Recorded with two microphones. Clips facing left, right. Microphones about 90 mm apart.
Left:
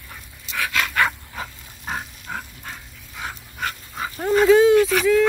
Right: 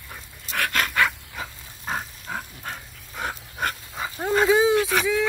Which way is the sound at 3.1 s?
40° right (ahead or behind).